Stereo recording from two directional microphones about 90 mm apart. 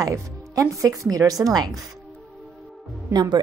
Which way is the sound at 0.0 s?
35° right (ahead or behind).